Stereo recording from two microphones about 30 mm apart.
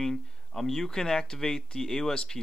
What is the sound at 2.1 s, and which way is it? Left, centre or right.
Speech, left.